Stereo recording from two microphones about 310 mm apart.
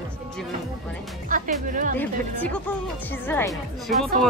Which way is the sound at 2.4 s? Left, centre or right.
Centre.